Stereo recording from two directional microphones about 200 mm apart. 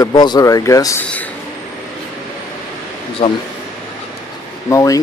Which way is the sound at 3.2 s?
30° left (ahead or behind).